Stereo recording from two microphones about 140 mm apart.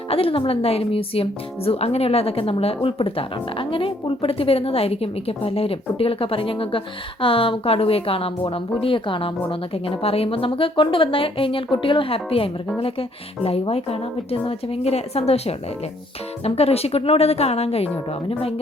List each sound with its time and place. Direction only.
0.1 s speech: 40° left (ahead or behind)